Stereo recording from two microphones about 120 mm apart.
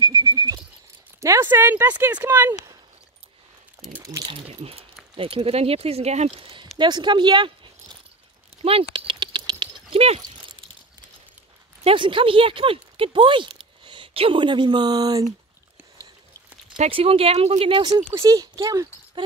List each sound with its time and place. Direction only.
0.0 s a sound: 30° right (ahead or behind)
1.2 s speech: 20° right (ahead or behind)
4.0 s a sound: 25° right (ahead or behind)
4.3 s keys jangling: 55° right (ahead or behind)
5.1 s speech: 50° right (ahead or behind)
8.6 s a sound: 45° right (ahead or behind)
9.8 s dog: 55° right (ahead or behind)
11.8 s speech: 45° right (ahead or behind)
16.9 s speech: 50° right (ahead or behind)
18.1 s a child's voice: 30° right (ahead or behind)